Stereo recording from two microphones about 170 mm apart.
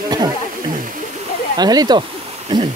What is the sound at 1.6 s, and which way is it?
Speech, 25° right (ahead or behind).